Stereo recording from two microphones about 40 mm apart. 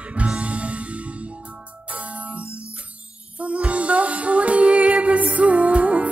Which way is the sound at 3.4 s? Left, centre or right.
Right.